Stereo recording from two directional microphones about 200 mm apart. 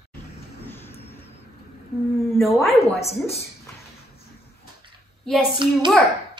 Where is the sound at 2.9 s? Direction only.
30° left (ahead or behind).